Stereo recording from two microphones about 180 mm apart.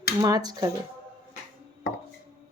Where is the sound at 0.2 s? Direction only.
20° right (ahead or behind).